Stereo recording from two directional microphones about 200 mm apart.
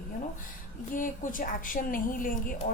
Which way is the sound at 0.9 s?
40° left (ahead or behind).